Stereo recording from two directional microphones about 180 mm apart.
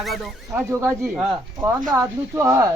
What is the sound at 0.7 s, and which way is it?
Speech, 15° right (ahead or behind).